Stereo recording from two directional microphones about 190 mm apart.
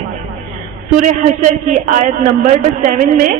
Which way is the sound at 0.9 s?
40° right (ahead or behind).